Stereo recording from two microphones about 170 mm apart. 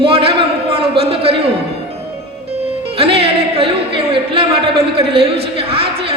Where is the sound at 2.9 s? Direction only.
35° right (ahead or behind).